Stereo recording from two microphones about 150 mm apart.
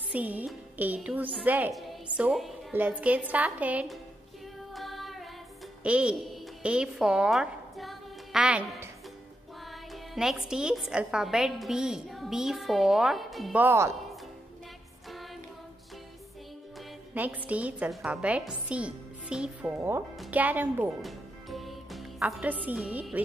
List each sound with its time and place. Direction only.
0.1 s a woman's voice: 10° right (ahead or behind)
1.7 s a woman's voice: centre (ahead or behind)
4.7 s music: centre (ahead or behind)
5.9 s a woman's voice: 5° right (ahead or behind)
10.1 s a woman's voice: 5° right (ahead or behind)
13.6 s a woman's voice: 20° right (ahead or behind)
17.1 s a woman's voice: 10° right (ahead or behind)
21.0 s music: centre (ahead or behind)
22.4 s a woman's voice: 10° right (ahead or behind)